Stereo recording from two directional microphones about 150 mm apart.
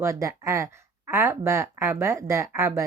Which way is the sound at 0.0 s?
20° right (ahead or behind).